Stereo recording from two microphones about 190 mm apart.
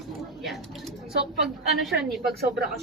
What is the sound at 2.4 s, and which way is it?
Speech, 55° right (ahead or behind).